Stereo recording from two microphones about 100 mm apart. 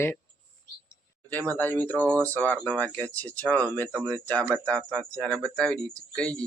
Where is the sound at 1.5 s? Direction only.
15° left (ahead or behind).